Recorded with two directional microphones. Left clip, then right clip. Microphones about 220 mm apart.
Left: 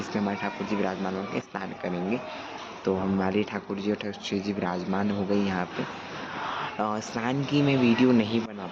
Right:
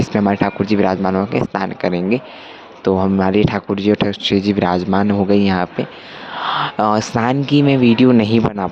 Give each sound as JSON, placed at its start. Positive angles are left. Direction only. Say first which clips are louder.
{"t": 0.0, "sound": "speech", "louder": "right 13 dB", "side_deg": -45}